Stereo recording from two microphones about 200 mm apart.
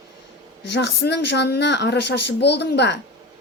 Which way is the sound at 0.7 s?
55° left (ahead or behind).